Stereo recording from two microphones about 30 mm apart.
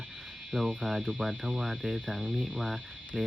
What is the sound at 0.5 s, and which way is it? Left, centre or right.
Speech, centre.